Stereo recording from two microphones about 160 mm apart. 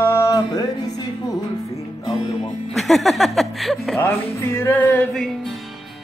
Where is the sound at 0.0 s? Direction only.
20° left (ahead or behind).